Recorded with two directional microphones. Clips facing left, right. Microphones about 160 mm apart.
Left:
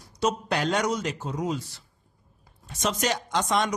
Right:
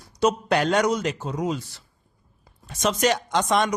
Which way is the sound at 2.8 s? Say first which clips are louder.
Right 5 dB; 70° right (ahead or behind).